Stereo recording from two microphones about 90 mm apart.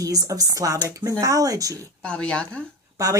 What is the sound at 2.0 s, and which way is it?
Speech, 10° left (ahead or behind).